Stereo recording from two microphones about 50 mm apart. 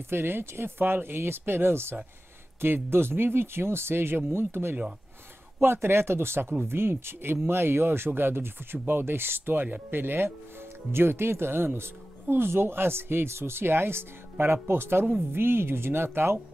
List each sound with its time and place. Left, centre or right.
0.1 s speech: right